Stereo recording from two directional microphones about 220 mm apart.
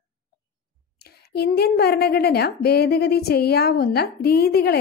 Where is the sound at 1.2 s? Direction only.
45° left (ahead or behind).